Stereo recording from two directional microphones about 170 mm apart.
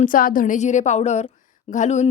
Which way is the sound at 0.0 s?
55° left (ahead or behind).